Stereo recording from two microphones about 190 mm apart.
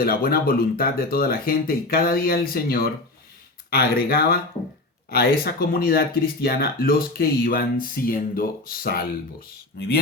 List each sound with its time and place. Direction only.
0.0 s speech: 50° left (ahead or behind)